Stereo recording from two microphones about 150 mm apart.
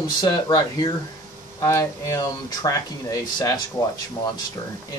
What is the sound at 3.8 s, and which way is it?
Speech, 25° left (ahead or behind).